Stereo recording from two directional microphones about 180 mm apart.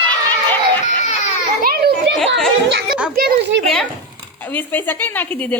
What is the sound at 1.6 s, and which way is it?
Children playing, 60° right (ahead or behind).